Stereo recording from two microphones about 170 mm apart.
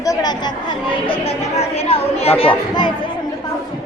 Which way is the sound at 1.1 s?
35° left (ahead or behind).